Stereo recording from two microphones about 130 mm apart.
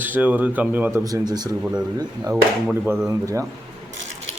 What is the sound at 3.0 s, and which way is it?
Speech, 25° right (ahead or behind).